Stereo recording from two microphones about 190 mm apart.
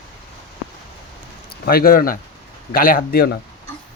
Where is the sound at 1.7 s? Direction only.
50° left (ahead or behind).